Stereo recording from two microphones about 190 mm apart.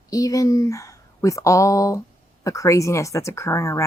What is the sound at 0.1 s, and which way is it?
Speech, 20° left (ahead or behind).